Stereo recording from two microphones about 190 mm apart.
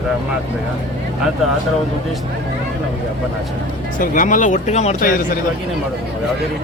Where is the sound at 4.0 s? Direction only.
45° left (ahead or behind).